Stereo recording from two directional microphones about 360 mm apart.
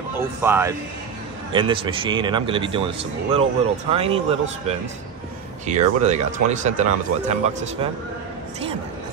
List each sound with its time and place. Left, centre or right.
0.4 s a man's voice: centre